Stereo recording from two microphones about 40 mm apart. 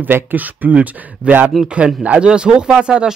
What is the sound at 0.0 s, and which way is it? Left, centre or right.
Speech, right.